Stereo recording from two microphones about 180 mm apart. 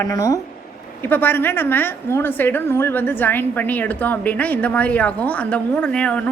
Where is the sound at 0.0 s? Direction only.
20° left (ahead or behind).